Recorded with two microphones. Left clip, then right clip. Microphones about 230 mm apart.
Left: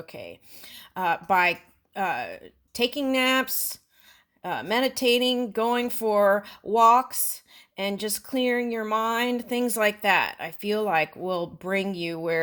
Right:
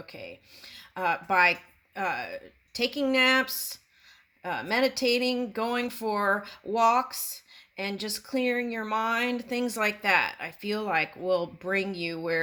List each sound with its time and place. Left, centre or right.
0.0 s speech: left